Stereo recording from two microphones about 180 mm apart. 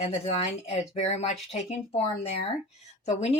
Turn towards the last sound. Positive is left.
turn(degrees=35)  # may be behind; listen again after turning